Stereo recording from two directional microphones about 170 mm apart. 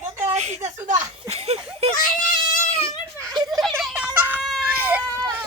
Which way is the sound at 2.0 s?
50° left (ahead or behind).